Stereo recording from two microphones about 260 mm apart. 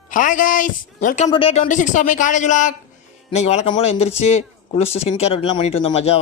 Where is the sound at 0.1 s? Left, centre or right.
Left.